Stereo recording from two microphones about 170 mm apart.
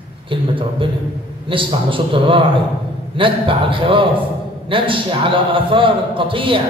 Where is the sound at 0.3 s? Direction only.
30° right (ahead or behind).